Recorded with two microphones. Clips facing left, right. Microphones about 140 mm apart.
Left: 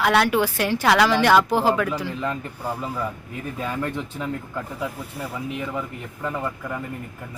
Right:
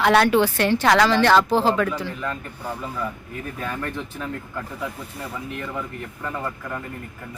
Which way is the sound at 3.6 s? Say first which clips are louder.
Left 3 dB; 15° left (ahead or behind).